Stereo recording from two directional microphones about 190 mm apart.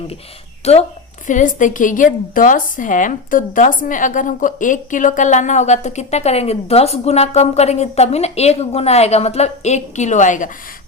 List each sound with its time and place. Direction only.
0.6 s a woman's voice: 35° left (ahead or behind)